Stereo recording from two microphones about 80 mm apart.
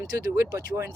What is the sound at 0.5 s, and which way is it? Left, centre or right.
Speech, right.